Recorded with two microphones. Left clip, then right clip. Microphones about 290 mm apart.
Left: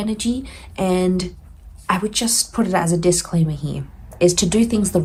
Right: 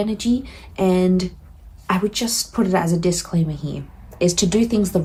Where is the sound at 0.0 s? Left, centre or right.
Left.